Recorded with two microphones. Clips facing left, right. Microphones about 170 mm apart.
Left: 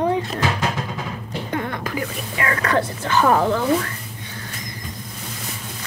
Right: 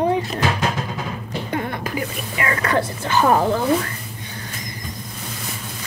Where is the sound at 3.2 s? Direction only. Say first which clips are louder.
Right 1 dB; 30° right (ahead or behind).